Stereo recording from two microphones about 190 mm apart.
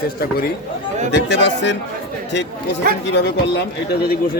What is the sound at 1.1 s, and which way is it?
Speech, 65° left (ahead or behind).